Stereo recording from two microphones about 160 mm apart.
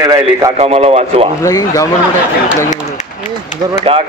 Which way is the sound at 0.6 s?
40° right (ahead or behind).